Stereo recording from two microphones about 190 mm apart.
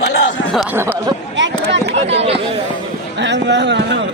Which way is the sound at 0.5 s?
10° right (ahead or behind).